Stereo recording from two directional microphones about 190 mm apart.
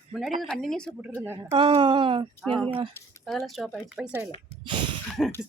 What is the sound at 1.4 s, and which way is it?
Speech, 25° right (ahead or behind).